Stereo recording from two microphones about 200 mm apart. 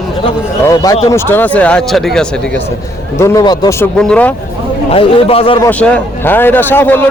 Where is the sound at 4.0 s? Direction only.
5° left (ahead or behind).